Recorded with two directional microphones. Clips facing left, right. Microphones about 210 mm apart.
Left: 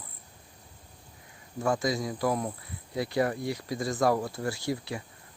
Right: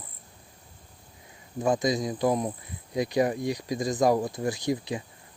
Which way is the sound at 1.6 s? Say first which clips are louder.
Right 3 dB; 20° right (ahead or behind).